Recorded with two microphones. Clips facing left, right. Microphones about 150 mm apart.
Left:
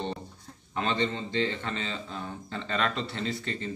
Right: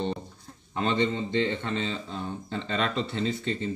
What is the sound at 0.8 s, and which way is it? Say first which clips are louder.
A man's voice: right 4 dB; 15° right (ahead or behind).